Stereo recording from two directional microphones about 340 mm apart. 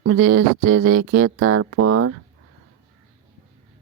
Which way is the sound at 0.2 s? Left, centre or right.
Right.